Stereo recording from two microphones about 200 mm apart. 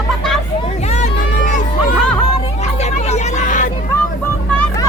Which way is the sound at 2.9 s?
35° left (ahead or behind).